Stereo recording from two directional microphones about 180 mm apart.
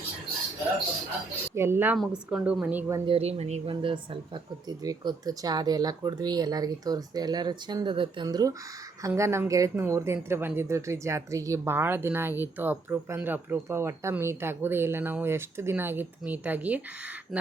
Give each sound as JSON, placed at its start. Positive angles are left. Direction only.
{"t": 1.5, "sound": "speech", "side_deg": -15}
{"t": 3.1, "sound": "a woman's voice", "side_deg": -35}